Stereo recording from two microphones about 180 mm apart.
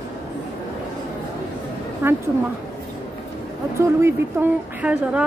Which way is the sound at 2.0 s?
10° right (ahead or behind).